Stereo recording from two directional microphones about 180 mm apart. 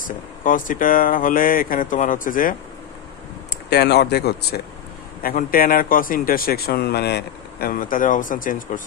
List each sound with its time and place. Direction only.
0.0 s speech: 50° left (ahead or behind)
3.7 s speech: 65° left (ahead or behind)
5.2 s speech: 55° left (ahead or behind)